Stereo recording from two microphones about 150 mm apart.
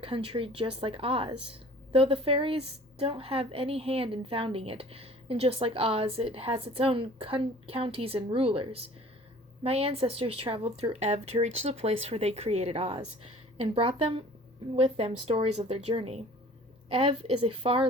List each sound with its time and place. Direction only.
0.0 s speech: 35° right (ahead or behind)